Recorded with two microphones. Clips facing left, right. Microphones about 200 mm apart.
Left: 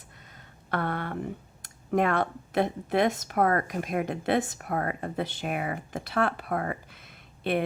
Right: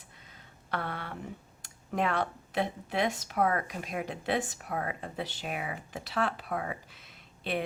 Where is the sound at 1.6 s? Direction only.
50° left (ahead or behind).